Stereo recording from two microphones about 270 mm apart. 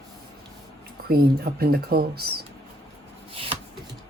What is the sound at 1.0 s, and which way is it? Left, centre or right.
Speech, right.